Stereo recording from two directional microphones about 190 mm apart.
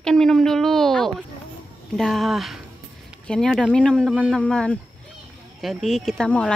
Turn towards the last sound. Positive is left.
turn(degrees=5)  # may be behind; listen again after turning